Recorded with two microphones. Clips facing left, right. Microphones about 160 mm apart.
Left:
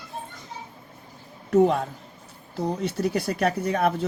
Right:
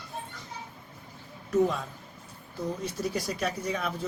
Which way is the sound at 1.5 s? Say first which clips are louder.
Left 6 dB; 60° left (ahead or behind).